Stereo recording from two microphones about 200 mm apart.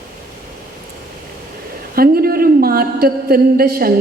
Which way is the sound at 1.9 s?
50° right (ahead or behind).